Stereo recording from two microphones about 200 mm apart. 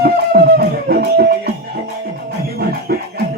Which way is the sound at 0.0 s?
50° right (ahead or behind).